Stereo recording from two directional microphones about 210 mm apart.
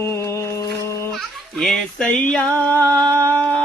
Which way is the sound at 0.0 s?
10° left (ahead or behind).